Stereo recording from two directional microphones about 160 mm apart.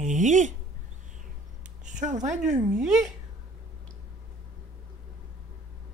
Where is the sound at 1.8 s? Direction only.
50° right (ahead or behind).